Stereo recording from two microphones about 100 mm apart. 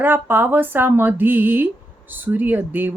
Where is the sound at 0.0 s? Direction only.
20° right (ahead or behind).